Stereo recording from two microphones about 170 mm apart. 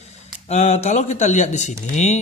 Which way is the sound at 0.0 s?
40° left (ahead or behind).